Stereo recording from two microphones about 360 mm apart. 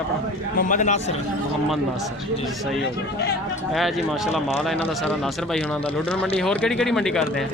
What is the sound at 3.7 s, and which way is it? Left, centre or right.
Speech, centre.